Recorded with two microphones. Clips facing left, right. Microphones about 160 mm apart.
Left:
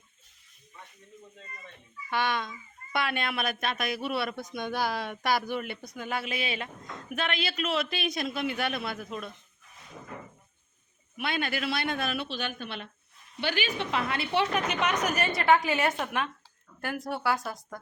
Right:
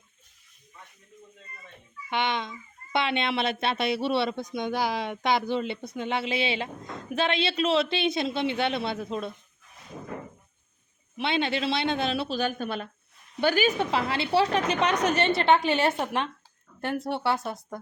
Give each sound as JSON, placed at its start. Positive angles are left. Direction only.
{"t": 2.0, "sound": "a child's voice", "side_deg": -20}
{"t": 11.2, "sound": "a child's voice", "side_deg": -25}
{"t": 13.9, "sound": "a woman's voice", "side_deg": -30}